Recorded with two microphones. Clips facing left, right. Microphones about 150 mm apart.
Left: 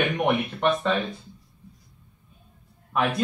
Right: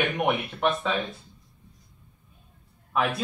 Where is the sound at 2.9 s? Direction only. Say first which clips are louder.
Left 1 dB; centre (ahead or behind).